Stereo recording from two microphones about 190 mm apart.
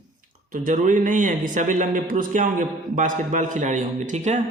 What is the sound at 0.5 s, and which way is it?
Speech, 45° right (ahead or behind).